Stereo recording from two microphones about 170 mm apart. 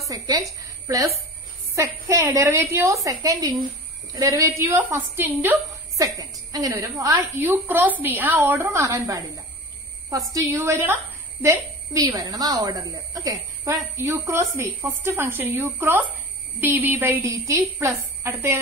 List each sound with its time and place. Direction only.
0.1 s a woman's voice: 20° right (ahead or behind)